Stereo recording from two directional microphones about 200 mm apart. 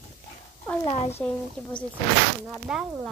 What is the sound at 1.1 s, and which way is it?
A woman's voice, 5° left (ahead or behind).